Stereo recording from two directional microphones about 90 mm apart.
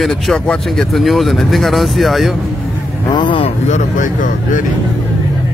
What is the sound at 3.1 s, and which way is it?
Vehicle, 60° left (ahead or behind).